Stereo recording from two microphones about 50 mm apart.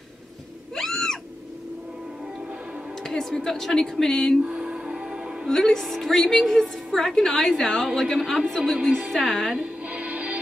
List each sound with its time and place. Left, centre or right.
0.7 s a sound: centre
3.0 s a woman's voice: centre
4.5 s music: right
5.5 s a woman's voice: centre
9.6 s music: right